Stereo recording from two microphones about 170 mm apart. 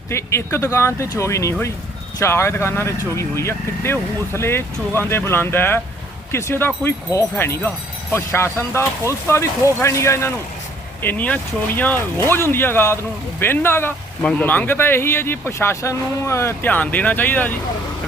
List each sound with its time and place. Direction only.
0.1 s speech: 15° left (ahead or behind)